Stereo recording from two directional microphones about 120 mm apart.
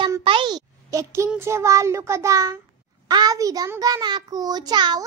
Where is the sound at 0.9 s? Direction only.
25° right (ahead or behind).